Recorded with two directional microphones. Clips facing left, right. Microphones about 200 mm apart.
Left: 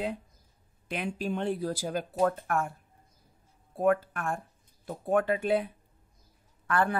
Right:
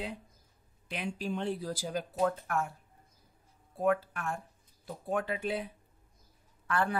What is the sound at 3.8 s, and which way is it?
Speech, 50° left (ahead or behind).